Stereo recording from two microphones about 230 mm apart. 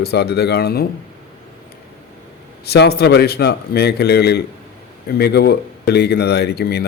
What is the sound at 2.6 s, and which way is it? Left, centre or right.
Speech, left.